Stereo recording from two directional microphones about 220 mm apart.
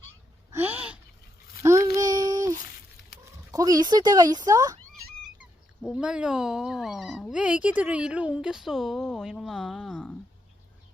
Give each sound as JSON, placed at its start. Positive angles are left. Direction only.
{"t": 0.5, "sound": "a sound", "side_deg": -10}
{"t": 1.6, "sound": "child singing", "side_deg": -15}
{"t": 3.5, "sound": "speech", "side_deg": -15}
{"t": 5.4, "sound": "speech", "side_deg": -5}